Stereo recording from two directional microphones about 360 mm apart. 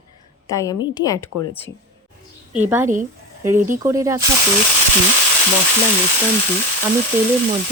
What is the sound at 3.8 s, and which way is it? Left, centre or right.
Speech, centre.